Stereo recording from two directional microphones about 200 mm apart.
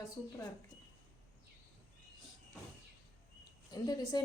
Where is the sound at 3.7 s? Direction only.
20° left (ahead or behind).